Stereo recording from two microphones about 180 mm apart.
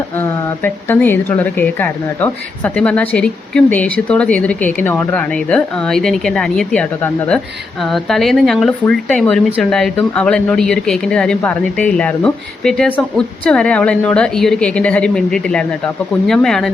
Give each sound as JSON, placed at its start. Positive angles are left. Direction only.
{"t": 0.2, "sound": "a woman's voice", "side_deg": 10}